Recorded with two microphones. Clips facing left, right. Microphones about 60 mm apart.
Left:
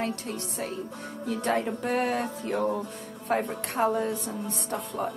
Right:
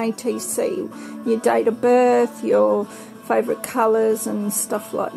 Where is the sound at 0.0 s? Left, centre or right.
Right.